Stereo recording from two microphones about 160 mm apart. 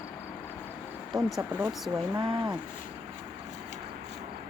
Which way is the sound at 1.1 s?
Centre (ahead or behind).